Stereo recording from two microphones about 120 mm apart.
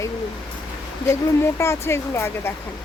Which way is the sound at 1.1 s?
25° left (ahead or behind).